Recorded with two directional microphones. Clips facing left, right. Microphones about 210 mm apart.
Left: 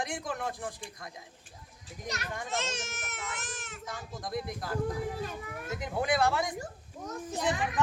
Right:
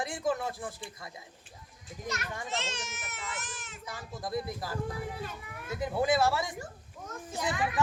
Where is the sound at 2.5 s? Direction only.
45° left (ahead or behind).